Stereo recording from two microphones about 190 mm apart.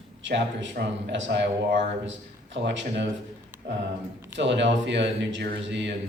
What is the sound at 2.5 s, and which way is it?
Speech, 75° right (ahead or behind).